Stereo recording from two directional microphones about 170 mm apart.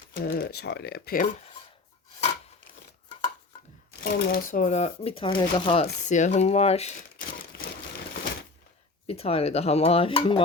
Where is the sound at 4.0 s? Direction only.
65° left (ahead or behind); by 6.9 s 40° left (ahead or behind).